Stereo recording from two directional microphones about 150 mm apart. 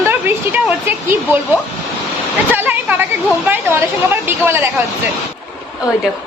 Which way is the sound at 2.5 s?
10° right (ahead or behind).